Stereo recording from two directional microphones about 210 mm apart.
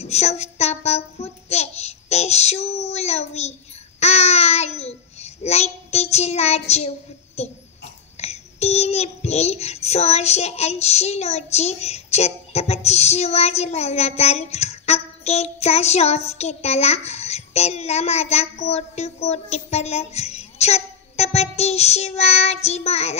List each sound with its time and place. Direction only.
0.0 s child singing: 30° left (ahead or behind)
7.4 s a child's voice: 30° left (ahead or behind)